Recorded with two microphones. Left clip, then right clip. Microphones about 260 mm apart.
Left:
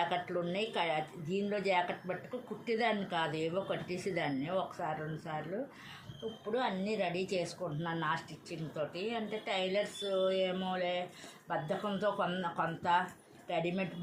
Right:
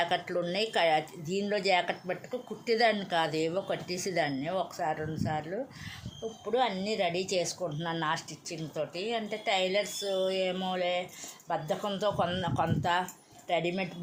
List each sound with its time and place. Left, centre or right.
0.0 s speech: right
6.5 s speech: right